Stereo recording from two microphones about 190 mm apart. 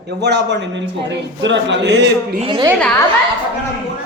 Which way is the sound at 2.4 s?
25° right (ahead or behind).